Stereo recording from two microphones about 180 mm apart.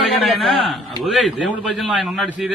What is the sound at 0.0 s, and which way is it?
A man's voice, centre (ahead or behind).